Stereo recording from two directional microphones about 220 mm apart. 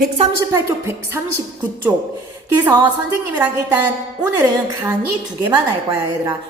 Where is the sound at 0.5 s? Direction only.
10° right (ahead or behind).